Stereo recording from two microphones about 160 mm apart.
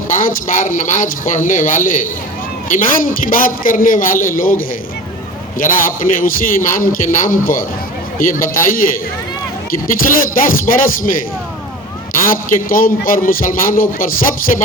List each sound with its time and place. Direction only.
0.1 s a man's voice: 60° left (ahead or behind)
12.2 s a man's voice: 60° left (ahead or behind)